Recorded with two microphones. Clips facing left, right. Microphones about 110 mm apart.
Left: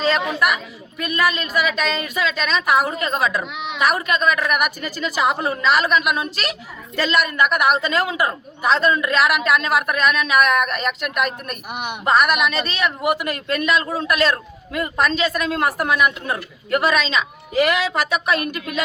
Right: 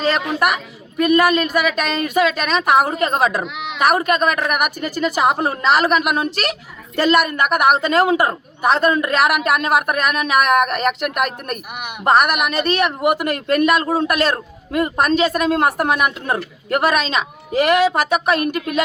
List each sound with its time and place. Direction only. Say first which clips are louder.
0.1 s speech: right 3 dB; 50° right (ahead or behind)
3.4 s speech: right 1 dB; centre (ahead or behind)
3.8 s speech: right 4 dB; 50° right (ahead or behind)